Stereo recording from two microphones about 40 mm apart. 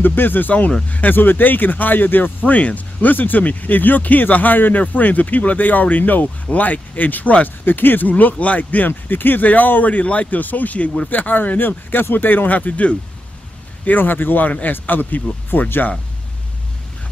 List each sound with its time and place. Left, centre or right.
0.0 s speech: left
1.1 s speech: left
7.4 s speech: left
8.1 s speech: left
13.8 s speech: left
15.5 s speech: left